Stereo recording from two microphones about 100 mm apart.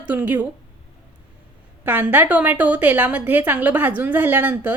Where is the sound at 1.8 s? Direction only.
20° right (ahead or behind).